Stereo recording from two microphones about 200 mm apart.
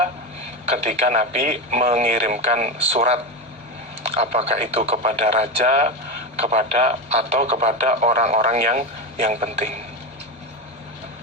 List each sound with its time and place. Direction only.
0.7 s speech: 35° right (ahead or behind)